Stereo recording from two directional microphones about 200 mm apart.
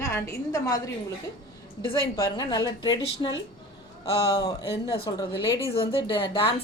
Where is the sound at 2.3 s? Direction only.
20° left (ahead or behind).